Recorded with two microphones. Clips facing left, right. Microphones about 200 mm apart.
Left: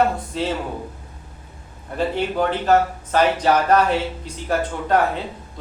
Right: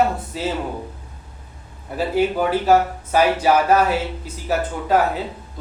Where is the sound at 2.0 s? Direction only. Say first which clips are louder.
Right 2 dB; 5° right (ahead or behind).